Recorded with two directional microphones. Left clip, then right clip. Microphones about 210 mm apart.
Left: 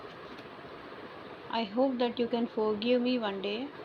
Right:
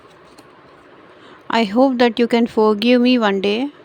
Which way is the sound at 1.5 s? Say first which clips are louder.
Right 14 dB; 65° right (ahead or behind).